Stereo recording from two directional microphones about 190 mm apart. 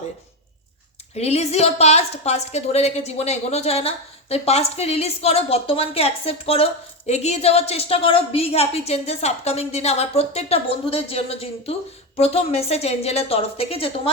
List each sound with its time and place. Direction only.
1.1 s a woman's voice: 35° left (ahead or behind)